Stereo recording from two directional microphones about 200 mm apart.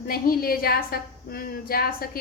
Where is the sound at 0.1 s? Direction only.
50° left (ahead or behind).